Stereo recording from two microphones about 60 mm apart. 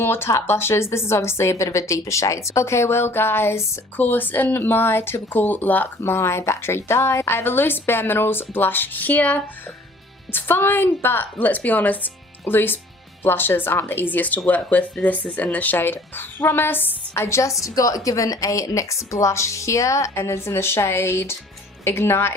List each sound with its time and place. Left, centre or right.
0.0 s a woman's voice: left
3.9 s a woman's voice: left
6.0 s a woman's voice: left
10.3 s a woman's voice: left
17.2 s a woman's voice: left
17.7 s a woman's voice: left